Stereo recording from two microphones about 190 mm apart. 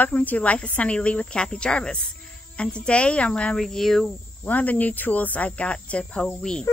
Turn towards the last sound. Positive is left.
turn(degrees=5)  # may be behind; listen again after turning